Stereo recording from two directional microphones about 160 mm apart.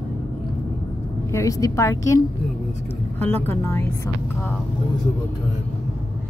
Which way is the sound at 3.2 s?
15° left (ahead or behind).